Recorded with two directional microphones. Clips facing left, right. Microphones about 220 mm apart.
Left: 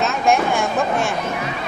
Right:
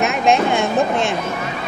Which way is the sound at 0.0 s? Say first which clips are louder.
Right 2 dB; 20° right (ahead or behind).